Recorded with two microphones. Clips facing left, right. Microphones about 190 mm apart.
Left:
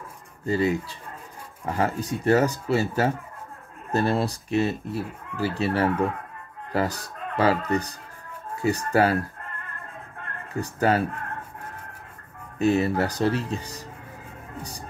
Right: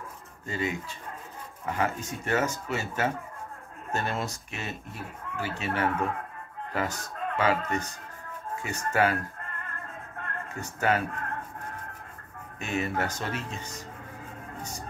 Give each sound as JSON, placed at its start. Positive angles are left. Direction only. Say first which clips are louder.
{"t": 0.5, "sound": "speech", "louder": "left 8 dB", "side_deg": 35}
{"t": 10.5, "sound": "speech", "louder": "left 5 dB", "side_deg": 35}
{"t": 12.5, "sound": "speech", "louder": "left 9 dB", "side_deg": 35}